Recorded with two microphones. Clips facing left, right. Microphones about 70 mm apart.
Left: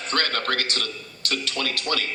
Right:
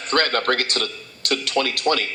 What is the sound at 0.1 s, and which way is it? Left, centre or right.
Speech, right.